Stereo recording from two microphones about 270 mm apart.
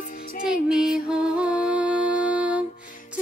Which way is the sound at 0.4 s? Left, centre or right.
Centre.